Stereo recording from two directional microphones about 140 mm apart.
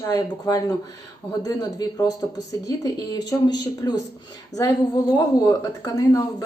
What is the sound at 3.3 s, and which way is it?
Speech, 30° left (ahead or behind).